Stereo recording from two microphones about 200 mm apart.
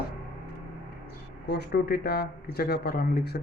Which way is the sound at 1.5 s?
55° left (ahead or behind).